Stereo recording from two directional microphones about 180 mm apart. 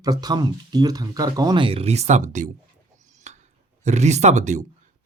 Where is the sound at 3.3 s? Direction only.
40° right (ahead or behind).